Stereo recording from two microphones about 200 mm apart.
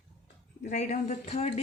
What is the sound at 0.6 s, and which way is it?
Speech, 35° left (ahead or behind).